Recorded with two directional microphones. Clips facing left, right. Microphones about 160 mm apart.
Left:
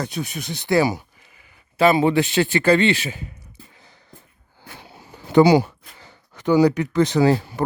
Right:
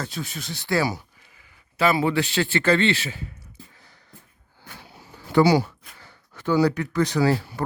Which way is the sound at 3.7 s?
20° left (ahead or behind).